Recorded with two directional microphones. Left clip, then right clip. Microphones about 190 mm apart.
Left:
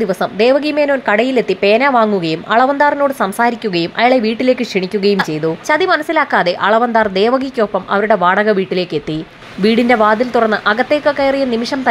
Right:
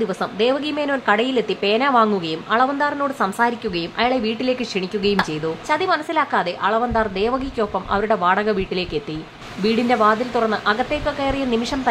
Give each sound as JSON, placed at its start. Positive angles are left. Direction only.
{"t": 0.0, "sound": "a woman's voice", "side_deg": 20}